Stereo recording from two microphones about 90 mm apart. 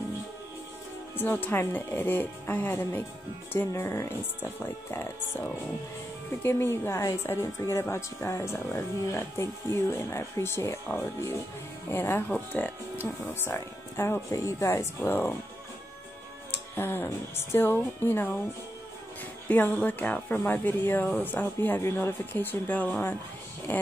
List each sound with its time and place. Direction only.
1.1 s speech: 20° left (ahead or behind)
6.4 s speech: 25° left (ahead or behind)
12.3 s speech: 15° left (ahead or behind); by 14.9 s 35° left (ahead or behind)
15.0 s speech: 20° left (ahead or behind)
16.7 s speech: 25° left (ahead or behind)
19.4 s speech: 20° left (ahead or behind)